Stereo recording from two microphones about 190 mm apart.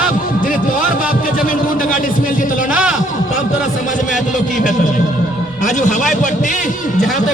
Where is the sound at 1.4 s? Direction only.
45° left (ahead or behind).